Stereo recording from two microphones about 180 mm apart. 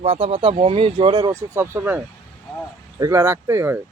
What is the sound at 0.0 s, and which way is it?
Speech, 35° right (ahead or behind).